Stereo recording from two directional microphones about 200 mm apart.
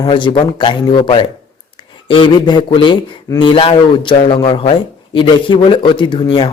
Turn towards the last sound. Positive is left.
turn(degrees=25)  # may be behind; listen again after turning